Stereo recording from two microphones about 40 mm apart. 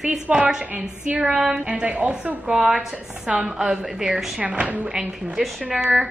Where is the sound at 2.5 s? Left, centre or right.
Centre.